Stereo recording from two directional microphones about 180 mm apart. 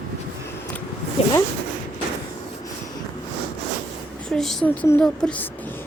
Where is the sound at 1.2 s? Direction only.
35° left (ahead or behind).